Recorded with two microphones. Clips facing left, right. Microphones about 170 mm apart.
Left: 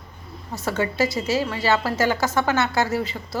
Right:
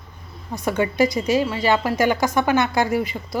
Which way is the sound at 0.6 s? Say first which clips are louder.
Right 3 dB; 15° right (ahead or behind).